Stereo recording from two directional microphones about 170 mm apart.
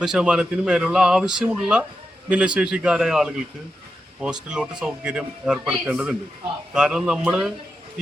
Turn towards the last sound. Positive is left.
turn(degrees=-5)  # may be behind; listen again after turning